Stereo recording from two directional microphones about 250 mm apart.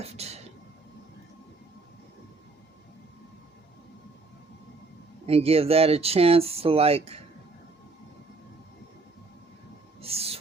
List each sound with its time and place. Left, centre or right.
0.0 s whispering: right
5.2 s speech: right
10.0 s owl: right